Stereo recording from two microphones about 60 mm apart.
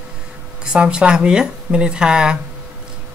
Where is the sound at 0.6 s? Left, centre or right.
Centre.